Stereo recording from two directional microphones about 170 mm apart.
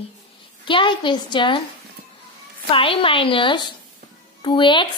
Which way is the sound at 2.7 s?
30° left (ahead or behind).